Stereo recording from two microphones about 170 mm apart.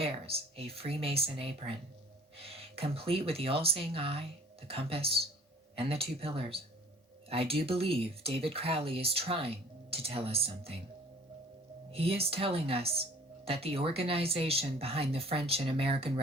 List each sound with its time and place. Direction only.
0.0 s speech: 35° right (ahead or behind)
11.9 s speech: 35° right (ahead or behind)